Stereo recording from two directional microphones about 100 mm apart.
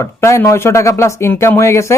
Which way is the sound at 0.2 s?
30° left (ahead or behind).